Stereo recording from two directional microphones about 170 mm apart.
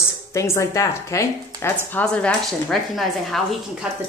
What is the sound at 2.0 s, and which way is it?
A woman's voice, 5° left (ahead or behind).